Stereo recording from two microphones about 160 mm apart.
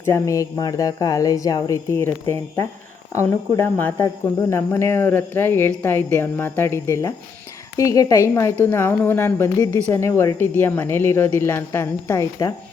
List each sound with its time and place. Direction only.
0.0 s speech: 20° left (ahead or behind)